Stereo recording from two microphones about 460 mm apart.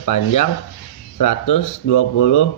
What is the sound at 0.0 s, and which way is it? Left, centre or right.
Speech, left.